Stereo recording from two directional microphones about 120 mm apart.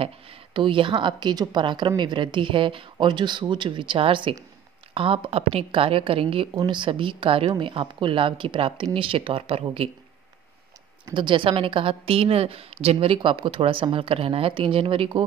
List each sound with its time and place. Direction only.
0.0 s a woman's voice: 50° right (ahead or behind)
11.1 s a woman's voice: 45° right (ahead or behind)